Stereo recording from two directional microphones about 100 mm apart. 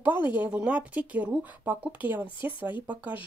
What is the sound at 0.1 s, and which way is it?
Speech, 50° left (ahead or behind).